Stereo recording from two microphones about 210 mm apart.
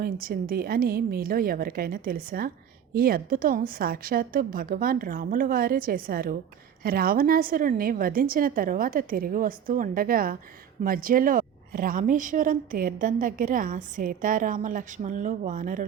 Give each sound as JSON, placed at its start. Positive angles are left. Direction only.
{"t": 0.0, "sound": "a woman's voice", "side_deg": -45}